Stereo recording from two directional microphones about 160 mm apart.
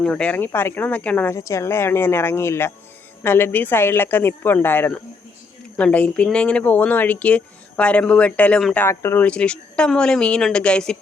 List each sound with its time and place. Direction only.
0.0 s speech: 5° left (ahead or behind)